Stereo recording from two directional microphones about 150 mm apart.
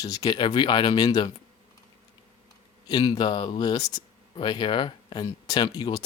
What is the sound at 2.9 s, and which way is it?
Speech, 25° left (ahead or behind).